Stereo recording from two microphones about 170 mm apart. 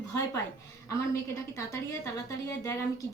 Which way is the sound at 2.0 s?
20° left (ahead or behind).